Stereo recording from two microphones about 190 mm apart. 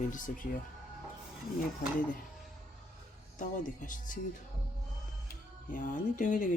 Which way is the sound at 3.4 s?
45° left (ahead or behind).